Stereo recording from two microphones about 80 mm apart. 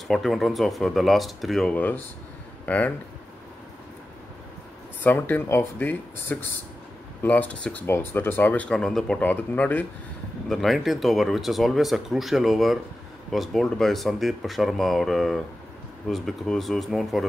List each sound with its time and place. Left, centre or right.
0.1 s speech: centre
2.6 s speech: centre
5.0 s speech: left
8.6 s speech: centre
9.2 s speech: left
10.5 s speech: centre